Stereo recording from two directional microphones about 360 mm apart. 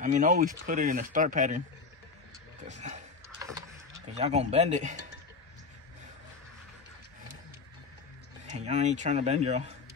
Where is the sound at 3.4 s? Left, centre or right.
Centre.